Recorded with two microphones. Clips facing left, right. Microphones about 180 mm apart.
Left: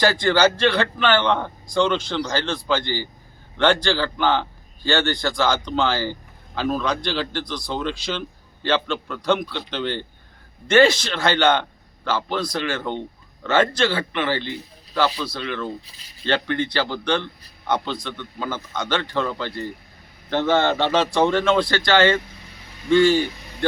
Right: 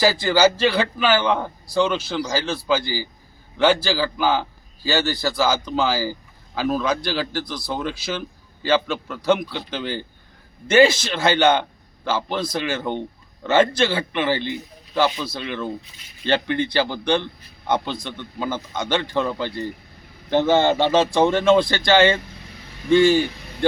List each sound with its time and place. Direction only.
0.0 s a man's voice: 5° right (ahead or behind)